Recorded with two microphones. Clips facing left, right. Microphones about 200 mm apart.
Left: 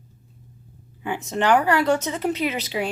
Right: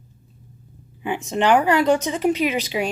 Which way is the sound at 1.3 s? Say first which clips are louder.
Right 2 dB; 20° right (ahead or behind).